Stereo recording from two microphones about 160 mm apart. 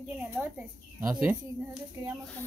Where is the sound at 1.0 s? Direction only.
10° right (ahead or behind).